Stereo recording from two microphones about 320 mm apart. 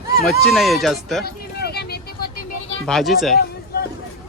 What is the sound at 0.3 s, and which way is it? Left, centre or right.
Speech, centre.